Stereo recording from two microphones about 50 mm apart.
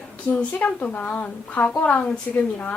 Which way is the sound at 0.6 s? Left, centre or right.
Left.